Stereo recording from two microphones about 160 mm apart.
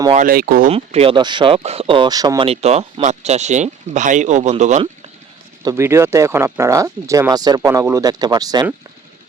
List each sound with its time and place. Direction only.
0.3 s speech: 65° right (ahead or behind)
0.7 s speech: 40° right (ahead or behind)
2.5 s speech: 40° right (ahead or behind)
5.6 s speech: 15° right (ahead or behind)